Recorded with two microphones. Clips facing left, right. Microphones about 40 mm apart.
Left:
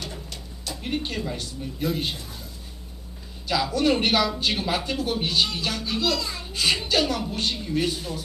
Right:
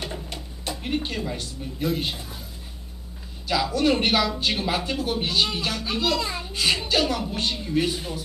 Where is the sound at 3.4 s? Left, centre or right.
Centre.